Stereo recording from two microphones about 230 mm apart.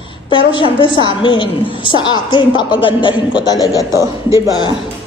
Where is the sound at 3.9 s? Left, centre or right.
Centre.